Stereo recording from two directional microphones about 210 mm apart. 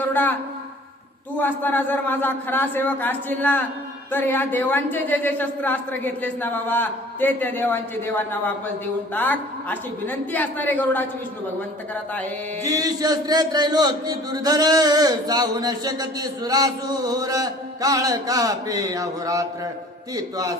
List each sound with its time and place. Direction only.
0.1 s a woman's voice: 10° left (ahead or behind)
1.4 s speech: 10° left (ahead or behind)
12.6 s speech: 15° right (ahead or behind)